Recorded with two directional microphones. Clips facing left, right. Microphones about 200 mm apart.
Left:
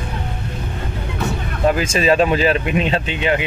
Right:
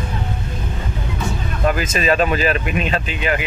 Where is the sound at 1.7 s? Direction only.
30° left (ahead or behind).